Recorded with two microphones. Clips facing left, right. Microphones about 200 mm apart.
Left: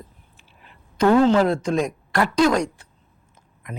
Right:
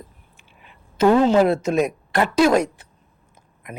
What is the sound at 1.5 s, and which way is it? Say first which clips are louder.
Speech: right 2 dB; 5° right (ahead or behind).